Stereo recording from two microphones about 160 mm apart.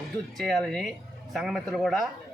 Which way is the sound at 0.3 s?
Centre (ahead or behind).